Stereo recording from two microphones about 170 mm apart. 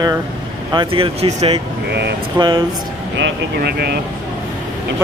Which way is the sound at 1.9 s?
80° right.